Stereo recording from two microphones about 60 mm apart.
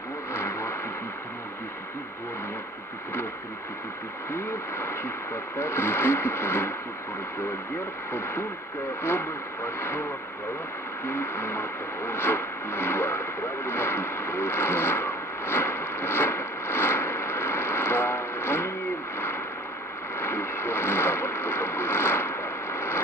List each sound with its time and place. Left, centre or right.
0.3 s vehicle: left
4.3 s speech: left
9.0 s speech: left
11.1 s radio: left
20.2 s a sound: left